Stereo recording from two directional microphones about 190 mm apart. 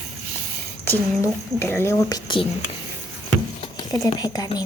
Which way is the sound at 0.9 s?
10° left (ahead or behind).